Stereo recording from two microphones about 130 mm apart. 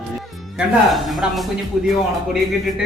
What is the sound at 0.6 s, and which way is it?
Speech, centre (ahead or behind).